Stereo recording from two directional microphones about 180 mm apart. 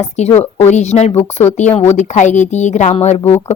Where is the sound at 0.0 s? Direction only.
40° left (ahead or behind).